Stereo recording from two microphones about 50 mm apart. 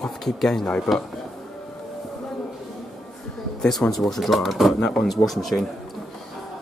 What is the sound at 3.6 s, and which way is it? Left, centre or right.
Speech, centre.